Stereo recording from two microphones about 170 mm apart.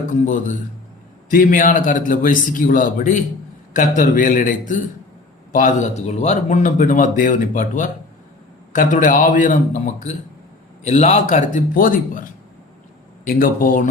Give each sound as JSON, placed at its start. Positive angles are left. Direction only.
{"t": 1.3, "sound": "speech", "side_deg": 55}
{"t": 13.2, "sound": "speech", "side_deg": 55}